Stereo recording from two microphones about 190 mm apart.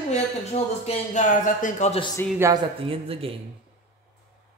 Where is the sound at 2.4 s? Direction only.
20° right (ahead or behind).